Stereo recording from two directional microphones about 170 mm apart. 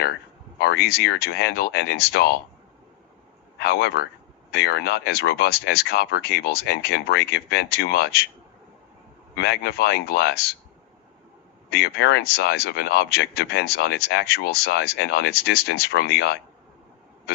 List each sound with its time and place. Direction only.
0.6 s speech: 70° left (ahead or behind)
3.6 s speech: 70° left (ahead or behind)
9.3 s speech: 75° left (ahead or behind)
11.7 s speech: 70° left (ahead or behind)